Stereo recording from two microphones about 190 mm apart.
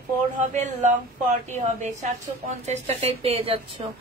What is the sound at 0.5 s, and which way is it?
A woman's voice, 40° right (ahead or behind).